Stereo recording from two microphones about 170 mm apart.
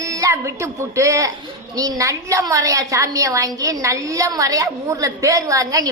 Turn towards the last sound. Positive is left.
turn(degrees=-20)  # may be behind; listen again after turning